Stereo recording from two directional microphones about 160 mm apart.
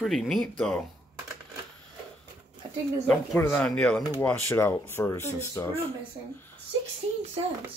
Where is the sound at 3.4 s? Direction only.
15° left (ahead or behind).